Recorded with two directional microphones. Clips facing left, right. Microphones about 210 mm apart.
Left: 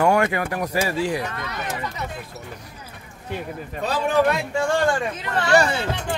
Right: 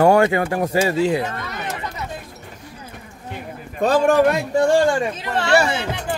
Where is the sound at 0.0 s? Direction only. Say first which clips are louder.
Right 5 dB; 30° right (ahead or behind).